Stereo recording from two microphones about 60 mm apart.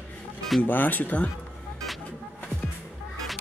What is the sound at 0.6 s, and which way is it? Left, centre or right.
Speech, left.